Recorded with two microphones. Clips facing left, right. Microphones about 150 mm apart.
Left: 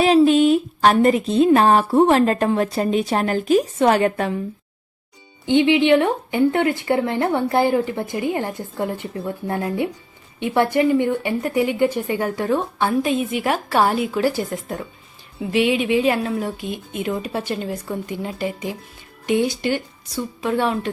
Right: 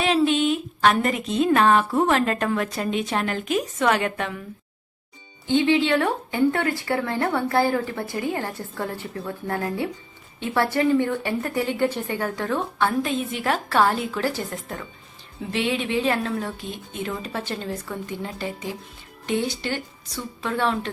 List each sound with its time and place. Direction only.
0.0 s a woman's voice: 35° left (ahead or behind)
5.5 s a woman's voice: 20° left (ahead or behind)